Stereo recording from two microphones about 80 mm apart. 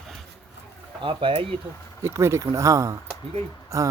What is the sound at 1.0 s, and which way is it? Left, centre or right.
Speech, right.